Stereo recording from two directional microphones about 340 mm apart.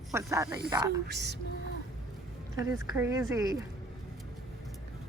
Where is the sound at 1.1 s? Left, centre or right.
Right.